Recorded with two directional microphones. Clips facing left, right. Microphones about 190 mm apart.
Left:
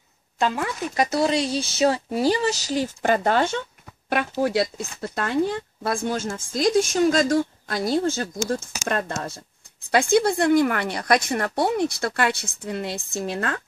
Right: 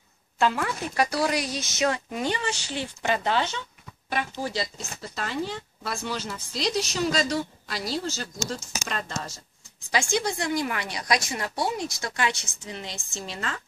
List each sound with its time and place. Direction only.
0.4 s speech: 20° left (ahead or behind); by 3.6 s 50° left (ahead or behind)
4.1 s a woman's voice: 60° left (ahead or behind)